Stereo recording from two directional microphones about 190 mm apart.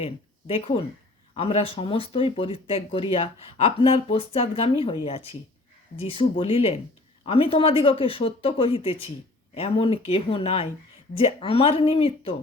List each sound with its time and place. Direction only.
0.0 s speech: 30° left (ahead or behind)